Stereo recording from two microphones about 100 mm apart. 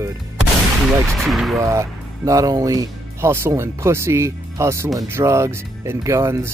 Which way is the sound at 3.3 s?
25° right (ahead or behind).